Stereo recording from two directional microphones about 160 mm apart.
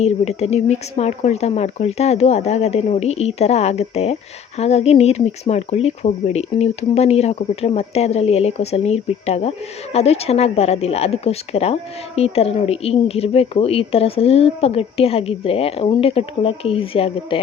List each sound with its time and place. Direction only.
0.0 s speech: 40° left (ahead or behind)